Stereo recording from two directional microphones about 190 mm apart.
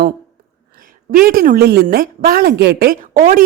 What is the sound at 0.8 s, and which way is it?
A woman's voice, 50° right (ahead or behind).